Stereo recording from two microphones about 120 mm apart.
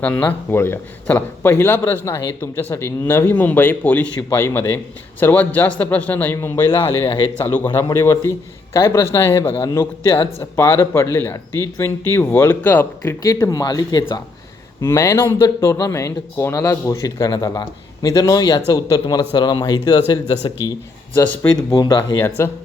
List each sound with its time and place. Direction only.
0.0 s a man's voice: 15° left (ahead or behind)
6.7 s a man's voice: 40° left (ahead or behind)
7.4 s a man's voice: 20° left (ahead or behind)
13.2 s a man's voice: 25° left (ahead or behind)
22.4 s a man's voice: 25° left (ahead or behind)